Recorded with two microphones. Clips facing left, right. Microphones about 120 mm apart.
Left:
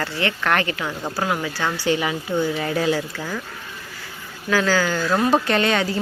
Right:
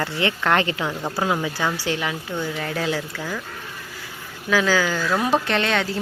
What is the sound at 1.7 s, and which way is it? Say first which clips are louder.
Speech: left 3 dB; centre (ahead or behind).